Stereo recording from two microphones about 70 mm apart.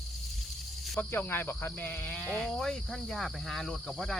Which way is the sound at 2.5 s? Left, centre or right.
Centre.